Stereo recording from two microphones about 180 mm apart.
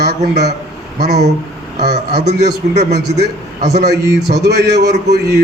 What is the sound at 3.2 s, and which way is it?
A man's voice, 65° right (ahead or behind).